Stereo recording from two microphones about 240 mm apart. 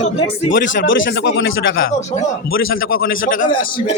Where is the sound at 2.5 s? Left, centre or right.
Left.